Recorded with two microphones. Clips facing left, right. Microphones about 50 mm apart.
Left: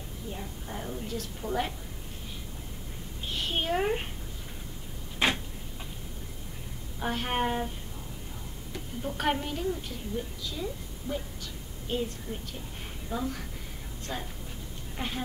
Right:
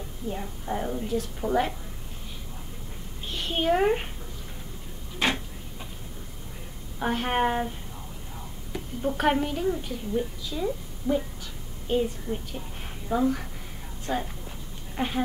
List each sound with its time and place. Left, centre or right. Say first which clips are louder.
0.3 s a woman's voice: right 8 dB; right
1.4 s a woman's voice: right 7 dB; centre
3.3 s a sound: right 2 dB; centre
3.6 s a woman's voice: right 7 dB; centre
5.2 s tick-tock: right 1 dB; centre
7.0 s a woman's voice: right 5 dB; centre
8.7 s a woman's voice: right 6 dB; centre
9.6 s a woman's voice: right 5 dB; right
11.9 s a woman's voice: right 6 dB; centre
13.1 s a woman's voice: right 9 dB; right